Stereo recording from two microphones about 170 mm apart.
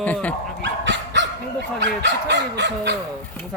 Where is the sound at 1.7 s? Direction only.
90° right.